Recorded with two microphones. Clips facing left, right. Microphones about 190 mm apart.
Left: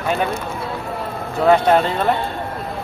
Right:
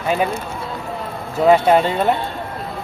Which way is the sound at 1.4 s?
5° right (ahead or behind).